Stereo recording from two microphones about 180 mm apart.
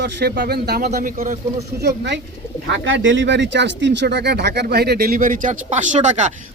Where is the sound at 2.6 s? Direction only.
85° right; by 6.3 s 40° right (ahead or behind).